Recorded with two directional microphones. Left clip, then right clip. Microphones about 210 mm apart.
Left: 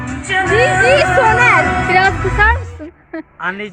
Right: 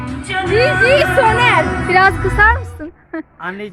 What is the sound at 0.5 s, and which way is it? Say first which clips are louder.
Music: even; 50° left (ahead or behind).